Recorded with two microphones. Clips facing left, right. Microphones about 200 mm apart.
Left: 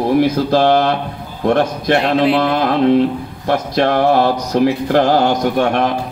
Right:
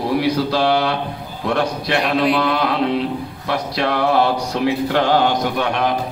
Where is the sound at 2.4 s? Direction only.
45° left (ahead or behind).